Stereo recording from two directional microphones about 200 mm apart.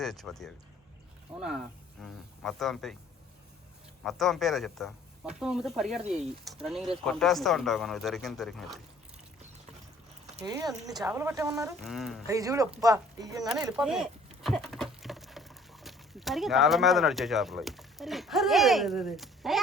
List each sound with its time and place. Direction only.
0.0 s speech: centre (ahead or behind)
4.0 s speech: centre (ahead or behind)
11.0 s speech: 10° right (ahead or behind)
11.8 s speech: centre (ahead or behind)
12.3 s speech: 15° right (ahead or behind)
13.7 s speech: centre (ahead or behind)